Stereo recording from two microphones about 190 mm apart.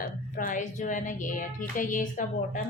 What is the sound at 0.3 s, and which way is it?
A woman's voice, 45° left (ahead or behind).